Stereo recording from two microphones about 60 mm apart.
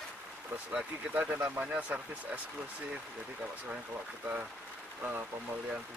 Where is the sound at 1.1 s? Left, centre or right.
Centre.